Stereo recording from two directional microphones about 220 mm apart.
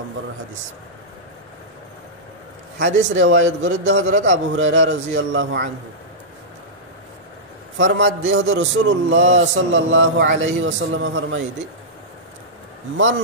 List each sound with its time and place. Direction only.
2.9 s a man's voice: 60° right (ahead or behind)
7.7 s a man's voice: 60° right (ahead or behind)